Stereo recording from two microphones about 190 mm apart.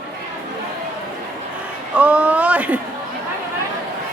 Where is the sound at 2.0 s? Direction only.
5° right (ahead or behind).